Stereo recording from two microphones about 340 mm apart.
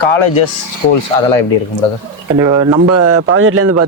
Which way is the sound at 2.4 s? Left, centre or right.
Centre.